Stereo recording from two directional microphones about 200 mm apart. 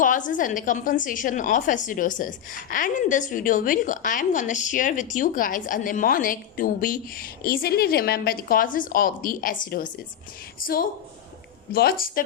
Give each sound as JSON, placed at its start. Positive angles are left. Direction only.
{"t": 0.0, "sound": "a woman's voice", "side_deg": 40}